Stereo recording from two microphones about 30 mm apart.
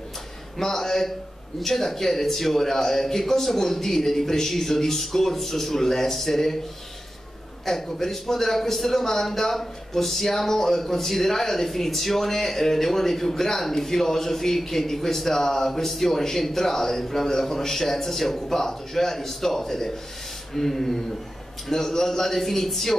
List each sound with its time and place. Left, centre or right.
0.6 s speech: centre
7.6 s speech: centre